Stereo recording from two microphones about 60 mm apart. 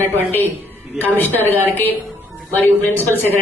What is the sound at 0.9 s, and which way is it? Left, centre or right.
A woman's voice, left.